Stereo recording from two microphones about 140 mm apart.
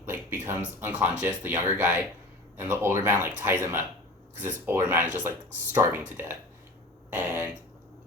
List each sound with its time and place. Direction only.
0.0 s speech: 15° right (ahead or behind)